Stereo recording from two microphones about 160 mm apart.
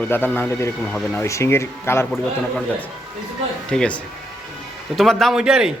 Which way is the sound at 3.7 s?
5° left (ahead or behind).